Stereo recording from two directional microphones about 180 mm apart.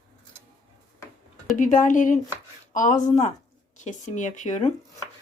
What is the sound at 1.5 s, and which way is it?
Speech, 45° left (ahead or behind).